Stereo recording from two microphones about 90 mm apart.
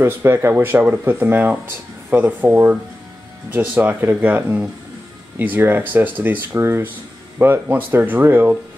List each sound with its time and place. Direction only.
0.0 s speech: 25° right (ahead or behind)